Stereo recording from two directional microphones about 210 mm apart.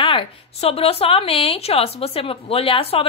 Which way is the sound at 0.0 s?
25° left (ahead or behind).